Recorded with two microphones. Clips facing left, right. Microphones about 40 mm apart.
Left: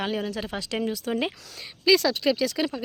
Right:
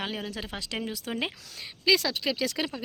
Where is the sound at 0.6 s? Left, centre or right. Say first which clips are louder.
Left 6 dB; centre.